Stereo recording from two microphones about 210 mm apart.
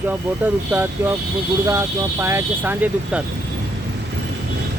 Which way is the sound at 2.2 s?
10° right (ahead or behind).